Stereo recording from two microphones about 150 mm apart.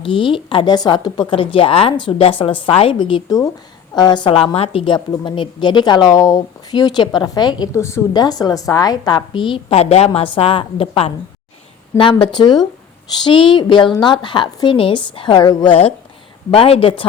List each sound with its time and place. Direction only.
0.0 s a woman's voice: 35° left (ahead or behind)
16.5 s a woman's voice: 40° left (ahead or behind)